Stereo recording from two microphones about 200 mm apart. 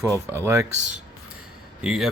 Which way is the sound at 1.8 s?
5° right (ahead or behind).